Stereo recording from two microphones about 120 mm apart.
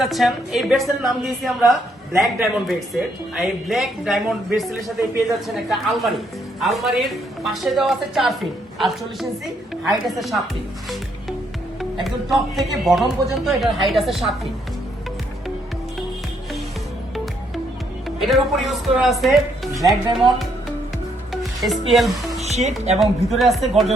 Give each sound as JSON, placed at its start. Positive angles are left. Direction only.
{"t": 0.0, "sound": "a woman's voice", "side_deg": 0}
{"t": 5.6, "sound": "a woman's voice", "side_deg": 0}
{"t": 12.0, "sound": "a woman's voice", "side_deg": 0}
{"t": 18.2, "sound": "a woman's voice", "side_deg": 0}
{"t": 21.6, "sound": "a woman's voice", "side_deg": 0}
{"t": 22.4, "sound": "speech", "side_deg": -65}
{"t": 23.0, "sound": "a woman's voice", "side_deg": 0}